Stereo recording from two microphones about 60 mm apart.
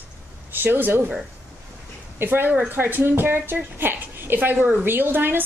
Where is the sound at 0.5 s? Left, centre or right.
Right.